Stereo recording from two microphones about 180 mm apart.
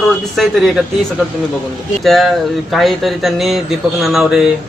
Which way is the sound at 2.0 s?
Centre (ahead or behind).